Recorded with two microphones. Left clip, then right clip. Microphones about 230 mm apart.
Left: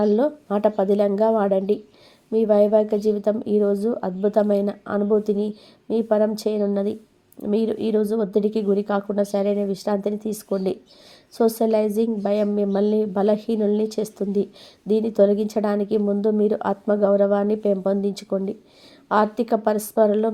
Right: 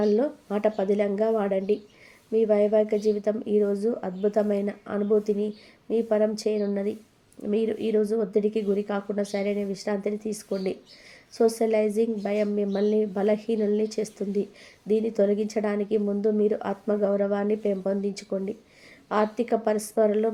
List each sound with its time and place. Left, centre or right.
0.0 s speech: left